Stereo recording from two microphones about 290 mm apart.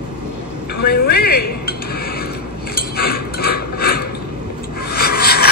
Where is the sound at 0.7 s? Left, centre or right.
Left.